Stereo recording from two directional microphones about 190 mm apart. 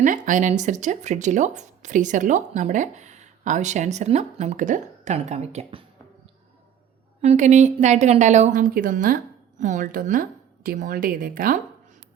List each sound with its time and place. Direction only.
0.0 s speech: 45° right (ahead or behind)
7.2 s a woman's voice: 40° right (ahead or behind)